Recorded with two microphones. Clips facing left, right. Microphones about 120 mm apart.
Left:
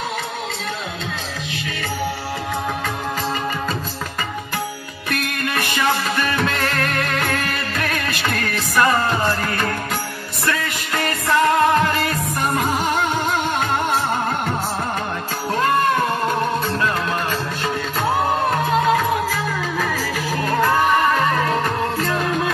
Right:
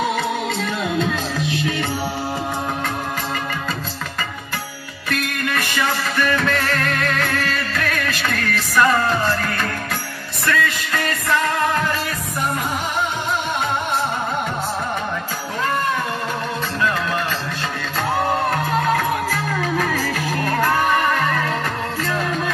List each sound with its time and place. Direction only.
6.3 s music: 15° left (ahead or behind)
18.9 s music: 15° left (ahead or behind)
20.9 s music: 20° left (ahead or behind)